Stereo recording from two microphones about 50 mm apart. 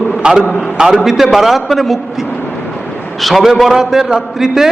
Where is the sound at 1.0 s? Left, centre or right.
Centre.